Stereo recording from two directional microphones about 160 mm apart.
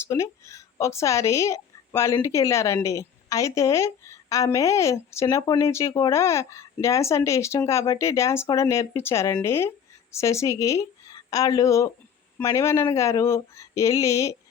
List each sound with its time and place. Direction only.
0.1 s speech: 20° left (ahead or behind)